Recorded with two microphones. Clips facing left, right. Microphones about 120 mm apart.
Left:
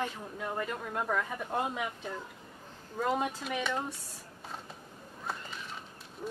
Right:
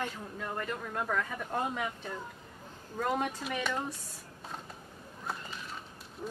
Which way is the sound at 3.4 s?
Centre (ahead or behind).